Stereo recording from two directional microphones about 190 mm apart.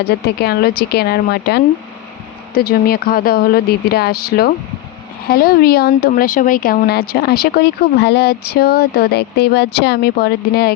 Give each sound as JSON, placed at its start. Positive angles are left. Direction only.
{"t": 0.0, "sound": "speech", "side_deg": 60}